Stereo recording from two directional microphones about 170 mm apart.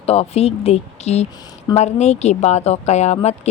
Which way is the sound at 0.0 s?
35° left (ahead or behind).